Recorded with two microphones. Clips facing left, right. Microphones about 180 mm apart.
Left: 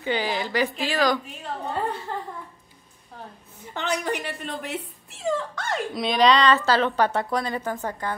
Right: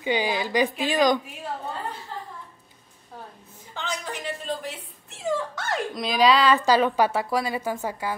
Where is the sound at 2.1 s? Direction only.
60° left (ahead or behind).